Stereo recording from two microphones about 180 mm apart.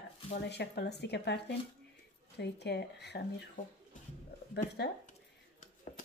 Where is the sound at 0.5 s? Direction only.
70° left (ahead or behind).